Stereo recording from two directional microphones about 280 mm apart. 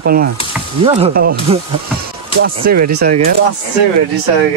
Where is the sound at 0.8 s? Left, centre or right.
Right.